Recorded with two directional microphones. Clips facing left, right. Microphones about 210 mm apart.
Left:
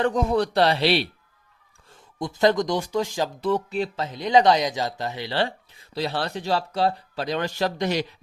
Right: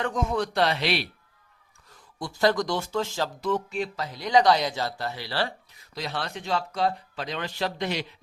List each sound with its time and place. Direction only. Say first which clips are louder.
0.0 s speech: left 5 dB; 35° left (ahead or behind)
1.9 s speech: left 5 dB; 20° left (ahead or behind)
3.4 s speech: left 4 dB; 35° left (ahead or behind)